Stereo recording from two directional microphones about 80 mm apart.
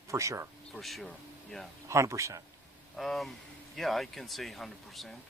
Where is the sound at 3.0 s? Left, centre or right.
Centre.